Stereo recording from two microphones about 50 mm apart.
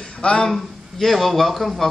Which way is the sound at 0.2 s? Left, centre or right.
Centre.